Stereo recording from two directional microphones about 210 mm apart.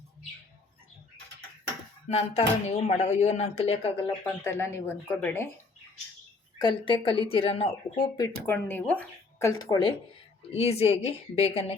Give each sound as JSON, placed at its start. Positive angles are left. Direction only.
{"t": 2.0, "sound": "speech", "side_deg": 30}
{"t": 4.3, "sound": "speech", "side_deg": 10}
{"t": 6.6, "sound": "speech", "side_deg": 20}